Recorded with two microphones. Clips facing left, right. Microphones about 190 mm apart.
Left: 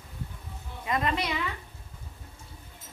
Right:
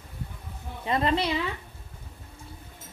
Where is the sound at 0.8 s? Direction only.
30° right (ahead or behind).